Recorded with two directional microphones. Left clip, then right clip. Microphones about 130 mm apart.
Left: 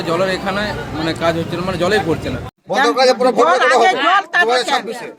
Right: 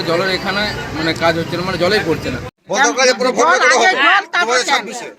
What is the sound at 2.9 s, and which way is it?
A man's voice, 35° left (ahead or behind).